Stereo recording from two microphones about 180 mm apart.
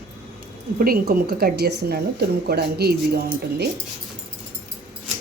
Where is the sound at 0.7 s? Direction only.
55° right (ahead or behind).